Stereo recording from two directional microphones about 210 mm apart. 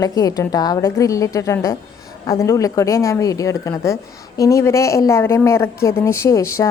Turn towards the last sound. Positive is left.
turn(degrees=15)  # may be behind; listen again after turning